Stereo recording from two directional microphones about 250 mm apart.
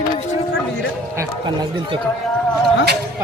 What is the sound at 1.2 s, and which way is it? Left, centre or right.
Speech, centre.